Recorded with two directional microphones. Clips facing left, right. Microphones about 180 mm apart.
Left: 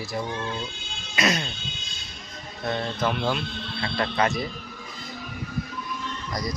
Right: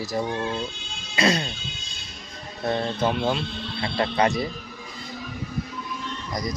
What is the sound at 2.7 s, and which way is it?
Speech, 30° right (ahead or behind).